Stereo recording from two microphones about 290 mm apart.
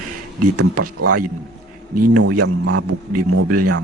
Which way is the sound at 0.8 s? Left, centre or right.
Right.